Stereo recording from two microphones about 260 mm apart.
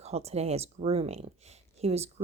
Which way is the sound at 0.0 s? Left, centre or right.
Right.